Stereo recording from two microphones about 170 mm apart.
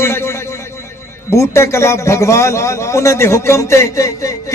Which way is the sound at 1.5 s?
15° left (ahead or behind).